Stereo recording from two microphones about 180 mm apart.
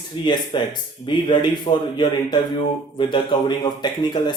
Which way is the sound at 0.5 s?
25° left (ahead or behind).